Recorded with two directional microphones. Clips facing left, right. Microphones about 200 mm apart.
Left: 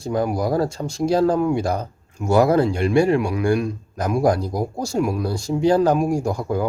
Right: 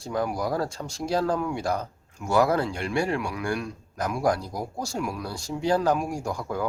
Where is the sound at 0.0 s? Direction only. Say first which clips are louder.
Left 6 dB; 20° left (ahead or behind).